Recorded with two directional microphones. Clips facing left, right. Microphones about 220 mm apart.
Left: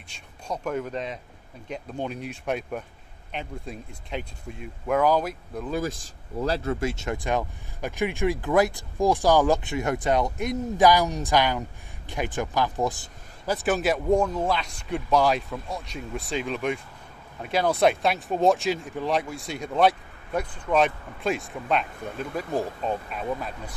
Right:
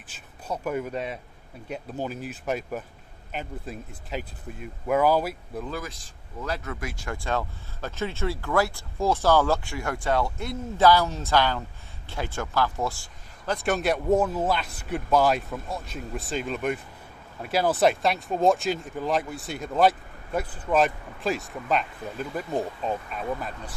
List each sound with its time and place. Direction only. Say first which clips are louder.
0.1 s speech: even; 5° right (ahead or behind)
5.9 s speech: left 9 dB; 35° left (ahead or behind); by 13.1 s 20° left (ahead or behind)
13.5 s speech: left 1 dB; centre (ahead or behind)